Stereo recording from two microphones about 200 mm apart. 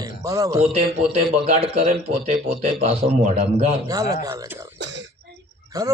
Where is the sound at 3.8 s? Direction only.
15° right (ahead or behind).